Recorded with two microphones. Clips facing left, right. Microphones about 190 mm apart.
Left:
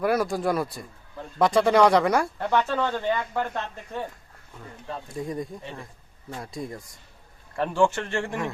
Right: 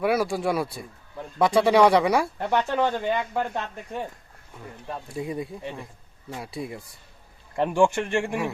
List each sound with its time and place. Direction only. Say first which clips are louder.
0.0 s speech: even; centre (ahead or behind)
2.4 s speech: right 1 dB; 15° right (ahead or behind)